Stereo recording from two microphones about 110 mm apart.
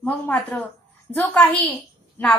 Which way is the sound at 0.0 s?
10° left (ahead or behind).